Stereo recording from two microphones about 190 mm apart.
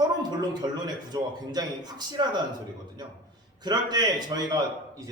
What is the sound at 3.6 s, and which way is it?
A man's voice, 20° right (ahead or behind).